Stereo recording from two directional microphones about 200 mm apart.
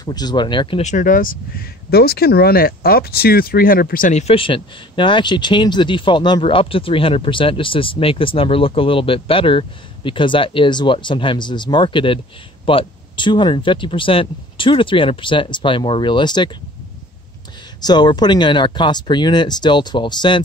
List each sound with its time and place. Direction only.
0.0 s speech: 20° left (ahead or behind)
17.7 s speech: 20° left (ahead or behind)